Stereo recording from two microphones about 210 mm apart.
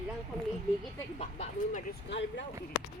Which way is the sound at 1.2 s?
30° left (ahead or behind).